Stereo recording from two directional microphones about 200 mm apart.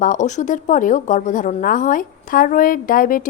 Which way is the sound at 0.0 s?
40° left (ahead or behind).